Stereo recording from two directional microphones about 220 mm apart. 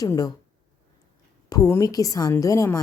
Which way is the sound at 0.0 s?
15° left (ahead or behind).